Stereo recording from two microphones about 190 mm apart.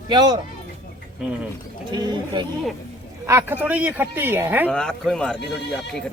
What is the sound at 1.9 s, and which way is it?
Speech, 20° right (ahead or behind).